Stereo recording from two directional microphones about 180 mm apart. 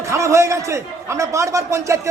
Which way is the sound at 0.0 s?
15° right (ahead or behind).